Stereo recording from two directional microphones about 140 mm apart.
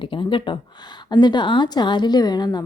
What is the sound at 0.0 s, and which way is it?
A woman's voice, 35° left (ahead or behind).